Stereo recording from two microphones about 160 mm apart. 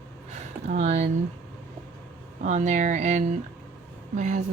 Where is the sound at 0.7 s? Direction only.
45° right (ahead or behind).